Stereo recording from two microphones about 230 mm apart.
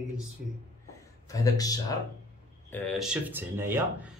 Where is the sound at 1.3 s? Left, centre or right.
Centre.